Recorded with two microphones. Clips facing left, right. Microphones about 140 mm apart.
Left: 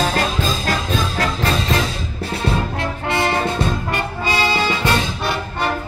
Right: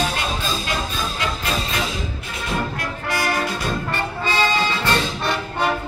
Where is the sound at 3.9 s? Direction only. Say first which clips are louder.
Left 2 dB; 15° left (ahead or behind).